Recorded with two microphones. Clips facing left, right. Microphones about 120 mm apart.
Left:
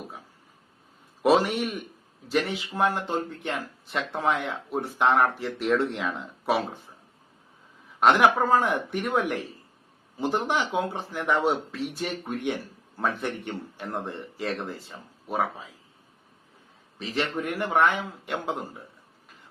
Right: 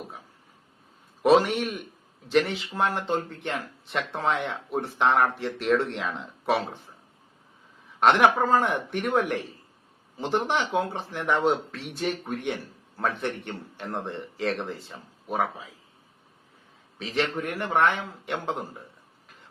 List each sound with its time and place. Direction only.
1.2 s a man's voice: centre (ahead or behind)
7.9 s speech: centre (ahead or behind)
17.0 s speech: centre (ahead or behind)